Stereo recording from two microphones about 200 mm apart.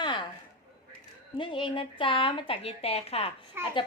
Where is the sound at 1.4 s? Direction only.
25° left (ahead or behind).